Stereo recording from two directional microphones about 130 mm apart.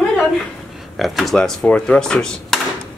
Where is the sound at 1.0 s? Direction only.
Centre (ahead or behind).